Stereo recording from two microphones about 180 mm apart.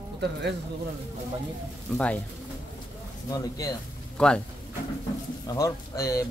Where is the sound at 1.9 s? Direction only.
5° left (ahead or behind).